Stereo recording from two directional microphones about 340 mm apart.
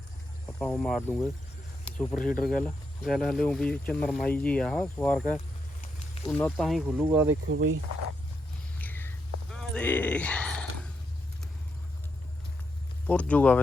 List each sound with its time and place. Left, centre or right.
0.6 s speech: centre
6.2 s speech: centre
7.3 s speech: right
8.8 s a sound: centre
13.1 s speech: centre